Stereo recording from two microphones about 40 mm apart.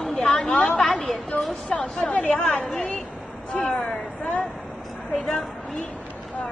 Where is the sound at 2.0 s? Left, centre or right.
Left.